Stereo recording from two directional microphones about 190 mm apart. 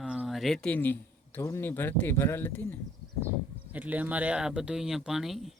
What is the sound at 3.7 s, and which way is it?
Speech, 10° right (ahead or behind).